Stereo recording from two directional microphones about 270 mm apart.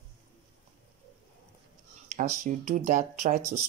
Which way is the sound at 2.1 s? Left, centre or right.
Right.